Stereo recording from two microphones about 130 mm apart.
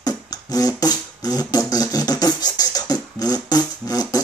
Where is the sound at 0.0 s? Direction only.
30° left (ahead or behind).